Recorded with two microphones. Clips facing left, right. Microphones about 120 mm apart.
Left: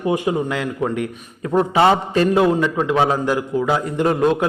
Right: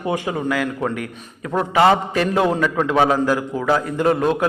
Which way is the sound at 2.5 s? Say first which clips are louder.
Even; 20° left (ahead or behind).